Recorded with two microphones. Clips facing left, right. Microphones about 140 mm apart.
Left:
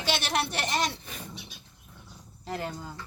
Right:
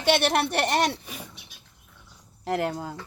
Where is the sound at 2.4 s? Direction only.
75° right (ahead or behind).